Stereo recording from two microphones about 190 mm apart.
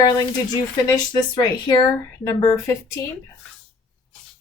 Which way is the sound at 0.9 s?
20° left (ahead or behind).